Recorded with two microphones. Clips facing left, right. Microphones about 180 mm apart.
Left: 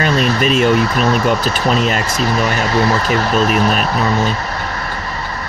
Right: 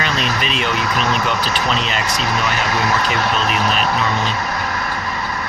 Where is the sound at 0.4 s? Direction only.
45° left (ahead or behind).